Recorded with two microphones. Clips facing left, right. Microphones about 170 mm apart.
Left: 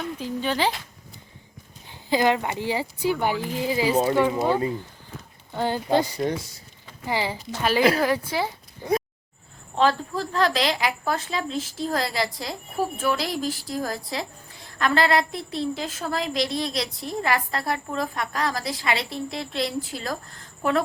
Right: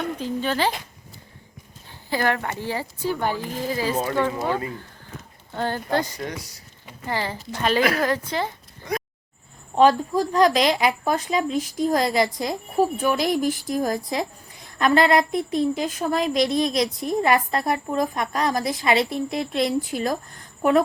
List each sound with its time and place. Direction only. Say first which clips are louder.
0.2 s speech: even; 15° left (ahead or behind)
1.9 s speech: left 2 dB; 15° left (ahead or behind)
6.1 s speech: left 6 dB; 25° left (ahead or behind)
7.0 s speech: left 1 dB; 10° left (ahead or behind)
9.7 s a woman's voice: right 5 dB; 15° right (ahead or behind)